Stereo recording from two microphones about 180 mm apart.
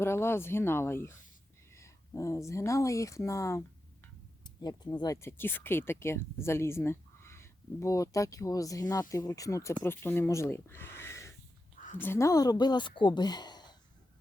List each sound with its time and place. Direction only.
0.0 s speech: 15° left (ahead or behind)